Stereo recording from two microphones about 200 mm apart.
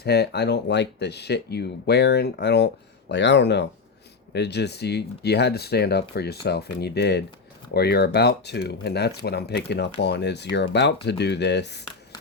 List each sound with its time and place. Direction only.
0.0 s speech: 55° left (ahead or behind)